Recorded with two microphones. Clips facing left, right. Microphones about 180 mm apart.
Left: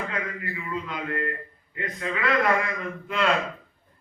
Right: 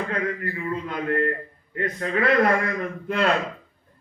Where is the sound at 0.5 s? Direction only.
45° right (ahead or behind).